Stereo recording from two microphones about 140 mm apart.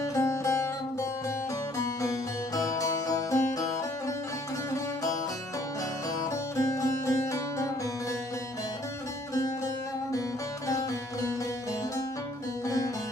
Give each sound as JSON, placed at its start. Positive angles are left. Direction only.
{"t": 0.1, "sound": "music", "side_deg": 20}
{"t": 1.8, "sound": "music", "side_deg": 25}
{"t": 6.5, "sound": "music", "side_deg": 20}
{"t": 10.7, "sound": "music", "side_deg": 25}
{"t": 12.6, "sound": "music", "side_deg": 25}